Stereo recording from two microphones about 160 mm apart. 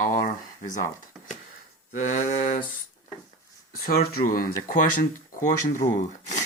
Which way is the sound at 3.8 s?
70° left (ahead or behind).